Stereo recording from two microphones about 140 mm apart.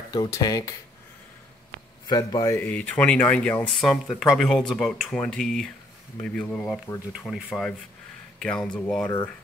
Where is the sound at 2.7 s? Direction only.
10° left (ahead or behind).